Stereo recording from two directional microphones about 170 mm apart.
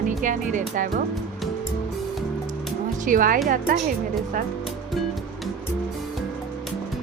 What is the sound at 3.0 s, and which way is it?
Speech, 50° right (ahead or behind).